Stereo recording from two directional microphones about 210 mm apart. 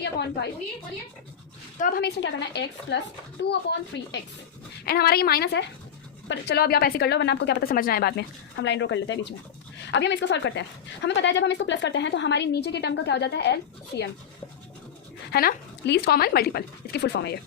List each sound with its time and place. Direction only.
0.0 s a woman's voice: 55° left (ahead or behind)
1.8 s a woman's voice: 45° left (ahead or behind)
15.3 s a woman's voice: 45° left (ahead or behind)